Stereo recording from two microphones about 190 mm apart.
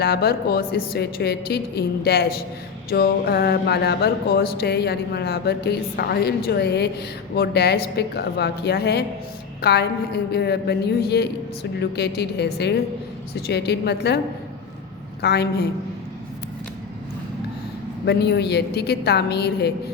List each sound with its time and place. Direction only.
0.0 s speech: 55° left (ahead or behind)
15.2 s speech: 60° left (ahead or behind)
18.0 s speech: 60° left (ahead or behind)